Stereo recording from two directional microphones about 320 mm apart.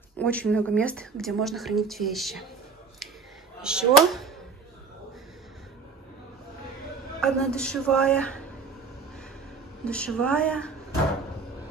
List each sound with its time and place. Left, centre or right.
0.2 s speech: centre
3.6 s speech: centre
7.2 s speech: centre
9.8 s speech: centre